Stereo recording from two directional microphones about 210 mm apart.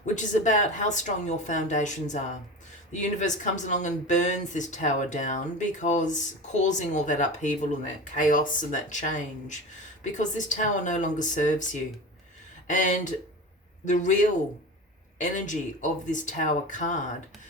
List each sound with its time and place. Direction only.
0.0 s speech: 35° left (ahead or behind)
12.6 s speech: 40° left (ahead or behind)